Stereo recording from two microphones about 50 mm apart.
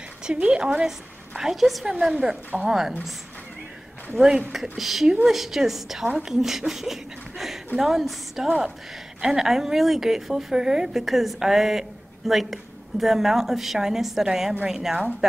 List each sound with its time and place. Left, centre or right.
0.2 s a woman's voice: centre
1.4 s a woman's voice: centre
4.5 s a woman's voice: centre
11.0 s a woman's voice: centre